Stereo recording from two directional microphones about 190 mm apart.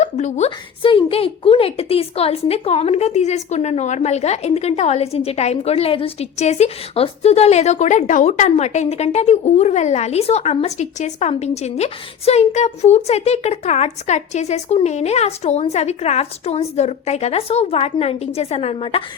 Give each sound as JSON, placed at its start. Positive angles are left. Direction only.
{"t": 0.0, "sound": "a woman's voice", "side_deg": 35}